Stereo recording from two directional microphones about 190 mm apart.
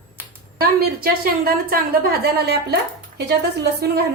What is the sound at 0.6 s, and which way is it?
A woman's voice, 50° right (ahead or behind).